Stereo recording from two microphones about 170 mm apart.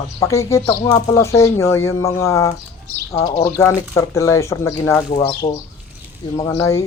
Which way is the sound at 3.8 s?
15° left (ahead or behind).